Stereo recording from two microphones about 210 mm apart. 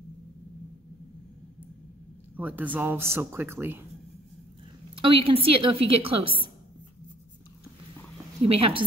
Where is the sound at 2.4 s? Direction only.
5° right (ahead or behind).